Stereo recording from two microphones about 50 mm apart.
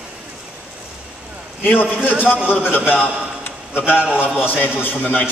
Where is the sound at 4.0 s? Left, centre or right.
Right.